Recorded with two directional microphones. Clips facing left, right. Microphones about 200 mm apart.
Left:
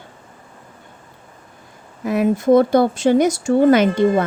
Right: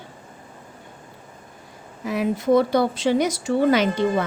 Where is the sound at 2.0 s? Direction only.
50° left (ahead or behind).